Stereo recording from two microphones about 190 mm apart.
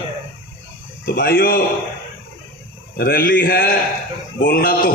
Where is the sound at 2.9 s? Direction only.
55° left (ahead or behind).